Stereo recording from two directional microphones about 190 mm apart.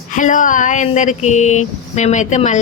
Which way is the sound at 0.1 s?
45° left (ahead or behind).